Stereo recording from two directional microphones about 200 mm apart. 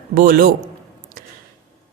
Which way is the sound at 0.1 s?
45° right (ahead or behind).